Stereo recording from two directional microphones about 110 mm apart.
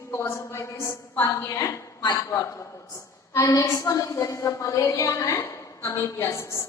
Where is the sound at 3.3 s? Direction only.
30° left (ahead or behind).